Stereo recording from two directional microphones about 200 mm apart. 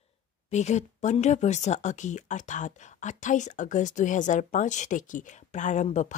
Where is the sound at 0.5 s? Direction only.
35° left (ahead or behind).